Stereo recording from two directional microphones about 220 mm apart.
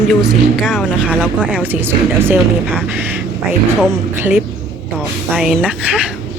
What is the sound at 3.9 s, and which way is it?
A woman's voice, 10° right (ahead or behind).